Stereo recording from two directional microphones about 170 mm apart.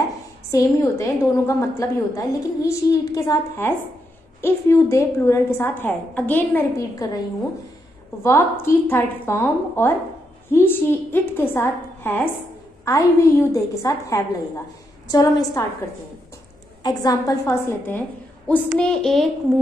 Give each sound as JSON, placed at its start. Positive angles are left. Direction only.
{"t": 0.5, "sound": "a woman's voice", "side_deg": 20}
{"t": 8.2, "sound": "a woman's voice", "side_deg": 15}
{"t": 16.8, "sound": "a woman's voice", "side_deg": 20}
{"t": 18.5, "sound": "a sound", "side_deg": 5}